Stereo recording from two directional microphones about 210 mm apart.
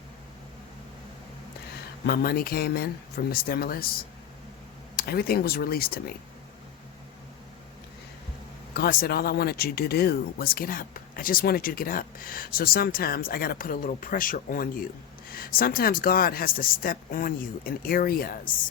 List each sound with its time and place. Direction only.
2.0 s speech: 45° left (ahead or behind)
4.9 s speech: 45° left (ahead or behind)
8.7 s speech: 45° left (ahead or behind)